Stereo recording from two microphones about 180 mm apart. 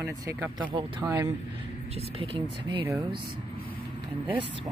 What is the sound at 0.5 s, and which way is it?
Speech, 25° right (ahead or behind).